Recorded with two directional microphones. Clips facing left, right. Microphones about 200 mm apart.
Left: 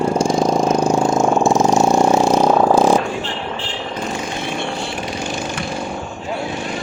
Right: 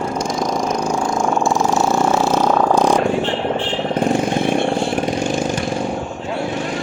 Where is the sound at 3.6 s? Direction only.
55° right (ahead or behind).